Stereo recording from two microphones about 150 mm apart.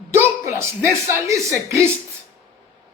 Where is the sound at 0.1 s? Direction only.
15° right (ahead or behind).